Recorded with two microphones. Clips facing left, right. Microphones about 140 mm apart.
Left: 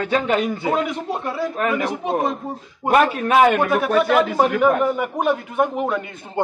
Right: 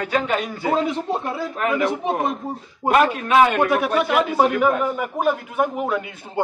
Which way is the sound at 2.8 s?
20° right (ahead or behind).